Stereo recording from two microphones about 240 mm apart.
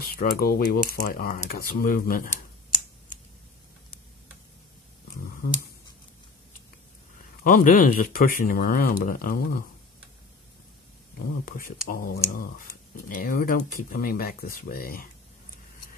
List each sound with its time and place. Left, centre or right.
0.0 s speech: left
7.4 s speech: left
11.1 s speech: left